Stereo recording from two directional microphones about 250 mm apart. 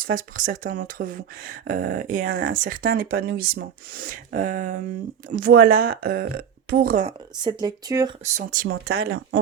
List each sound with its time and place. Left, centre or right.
0.0 s speech: right
7.4 s speech: centre
8.2 s speech: right